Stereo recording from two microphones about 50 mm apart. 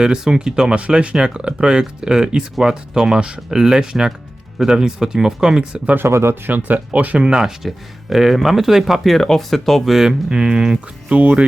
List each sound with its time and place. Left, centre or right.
0.0 s speech: centre
6.1 s speech: right
6.5 s speech: right
7.2 s speech: centre
8.1 s speech: centre
11.2 s speech: right